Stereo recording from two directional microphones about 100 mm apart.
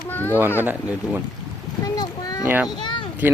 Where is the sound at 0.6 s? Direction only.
20° right (ahead or behind).